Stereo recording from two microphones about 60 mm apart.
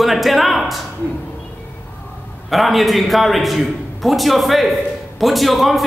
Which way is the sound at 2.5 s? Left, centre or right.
Centre.